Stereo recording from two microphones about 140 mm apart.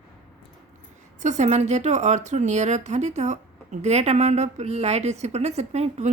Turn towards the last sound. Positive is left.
turn(degrees=-50)  # may be behind; listen again after turning